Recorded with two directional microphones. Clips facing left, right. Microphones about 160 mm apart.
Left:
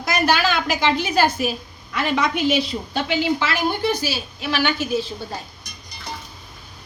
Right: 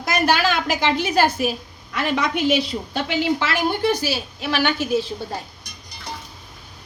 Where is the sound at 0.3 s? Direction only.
55° right (ahead or behind).